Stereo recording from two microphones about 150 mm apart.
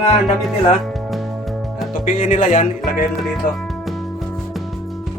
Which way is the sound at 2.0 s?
60° left (ahead or behind).